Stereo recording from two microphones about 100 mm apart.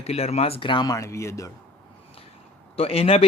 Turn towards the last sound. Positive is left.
turn(degrees=80)